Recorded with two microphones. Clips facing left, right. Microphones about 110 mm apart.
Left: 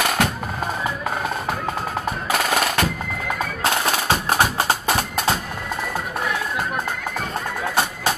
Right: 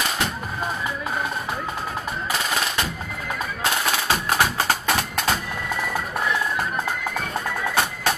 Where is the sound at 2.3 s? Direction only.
60° left (ahead or behind).